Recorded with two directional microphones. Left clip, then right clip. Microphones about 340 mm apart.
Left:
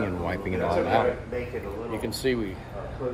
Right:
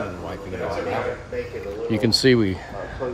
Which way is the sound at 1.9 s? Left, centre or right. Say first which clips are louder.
Right 11 dB; right.